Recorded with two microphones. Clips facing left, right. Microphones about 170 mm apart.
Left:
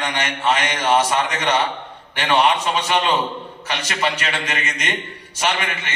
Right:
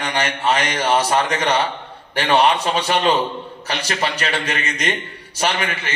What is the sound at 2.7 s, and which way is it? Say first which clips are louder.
A man's voice: right 2 dB; 35° right (ahead or behind).